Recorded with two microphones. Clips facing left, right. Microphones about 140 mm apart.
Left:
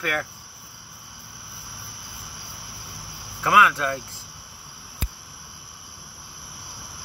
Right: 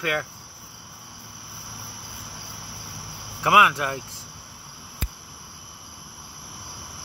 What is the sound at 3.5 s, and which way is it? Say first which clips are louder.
Speech: even; 20° right (ahead or behind).